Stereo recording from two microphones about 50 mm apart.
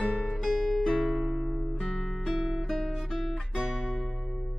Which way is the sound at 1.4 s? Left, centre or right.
Centre.